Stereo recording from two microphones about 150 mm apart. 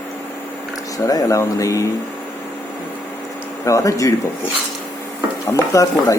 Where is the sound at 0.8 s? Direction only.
25° left (ahead or behind).